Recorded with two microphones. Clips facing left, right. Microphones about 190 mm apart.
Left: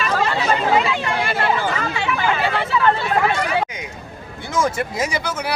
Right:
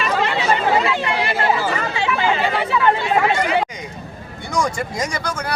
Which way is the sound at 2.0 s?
15° right (ahead or behind).